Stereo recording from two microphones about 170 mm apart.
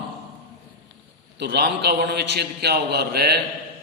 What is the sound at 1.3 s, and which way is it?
A man's voice, 85° right.